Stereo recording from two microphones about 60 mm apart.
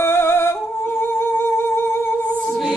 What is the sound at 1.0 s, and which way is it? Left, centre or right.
Music, left.